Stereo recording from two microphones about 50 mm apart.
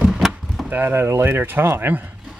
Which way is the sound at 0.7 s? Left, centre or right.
Right.